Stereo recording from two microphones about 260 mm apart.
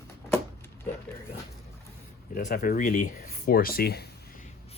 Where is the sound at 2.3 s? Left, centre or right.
Left.